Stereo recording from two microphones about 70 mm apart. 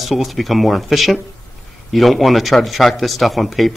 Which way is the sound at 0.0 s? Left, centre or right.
Centre.